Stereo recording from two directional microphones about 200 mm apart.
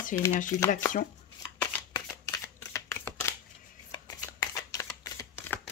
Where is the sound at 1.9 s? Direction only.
20° left (ahead or behind).